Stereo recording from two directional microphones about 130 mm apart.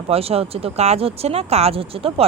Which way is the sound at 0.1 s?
50° right (ahead or behind).